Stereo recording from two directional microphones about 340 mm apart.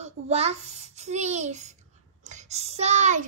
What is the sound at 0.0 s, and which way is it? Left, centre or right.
A child's voice, centre.